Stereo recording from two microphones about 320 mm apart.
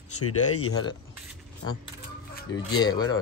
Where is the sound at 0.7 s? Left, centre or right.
Centre.